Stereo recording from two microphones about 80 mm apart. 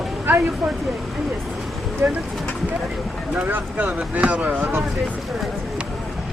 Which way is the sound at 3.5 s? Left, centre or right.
Right.